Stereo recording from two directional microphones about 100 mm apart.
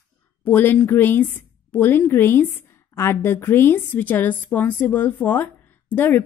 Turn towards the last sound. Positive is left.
turn(degrees=20)  # may be behind; listen again after turning